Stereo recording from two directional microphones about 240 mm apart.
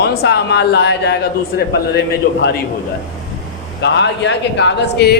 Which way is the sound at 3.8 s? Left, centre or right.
Left.